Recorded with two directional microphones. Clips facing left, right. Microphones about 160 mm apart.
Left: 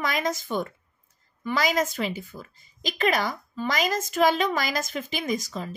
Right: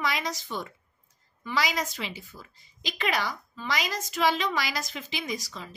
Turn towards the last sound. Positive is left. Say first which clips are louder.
# left 6 dB
turn(degrees=50)  # may be behind; listen again after turning